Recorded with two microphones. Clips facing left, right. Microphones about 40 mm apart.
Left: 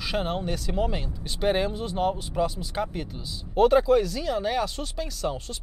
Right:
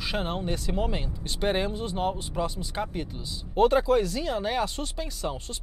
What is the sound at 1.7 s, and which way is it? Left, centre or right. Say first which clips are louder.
Speech: left 2 dB; right.